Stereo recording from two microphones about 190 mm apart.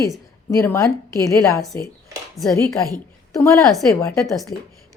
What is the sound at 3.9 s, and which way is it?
Speech, 15° left (ahead or behind).